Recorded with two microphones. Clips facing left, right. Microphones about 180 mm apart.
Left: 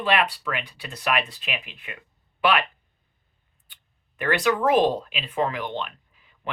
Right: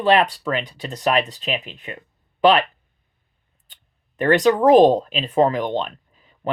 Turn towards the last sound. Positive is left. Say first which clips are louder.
# right 8 dB
turn(degrees=-40)  # may be behind; listen again after turning